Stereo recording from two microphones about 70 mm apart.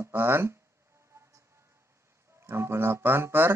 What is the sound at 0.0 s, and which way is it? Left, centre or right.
Speech, right.